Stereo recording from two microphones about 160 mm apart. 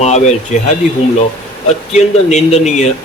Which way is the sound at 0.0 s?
45° left (ahead or behind).